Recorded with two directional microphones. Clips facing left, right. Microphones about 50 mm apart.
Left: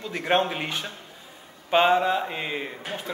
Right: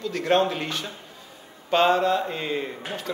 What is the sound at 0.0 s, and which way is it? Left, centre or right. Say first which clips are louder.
A man's voice: right 2 dB; left.